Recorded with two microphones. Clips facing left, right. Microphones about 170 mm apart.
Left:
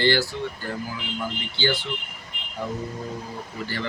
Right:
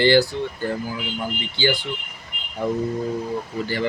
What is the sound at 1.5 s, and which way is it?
Speech, 15° right (ahead or behind).